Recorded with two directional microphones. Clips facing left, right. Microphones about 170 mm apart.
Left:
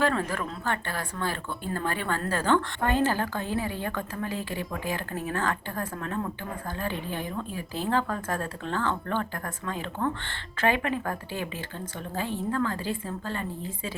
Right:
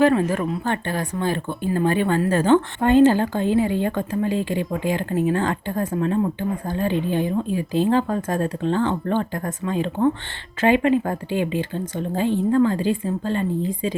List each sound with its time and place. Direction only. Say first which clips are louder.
0.0 s speech: right 9 dB; 15° right (ahead or behind)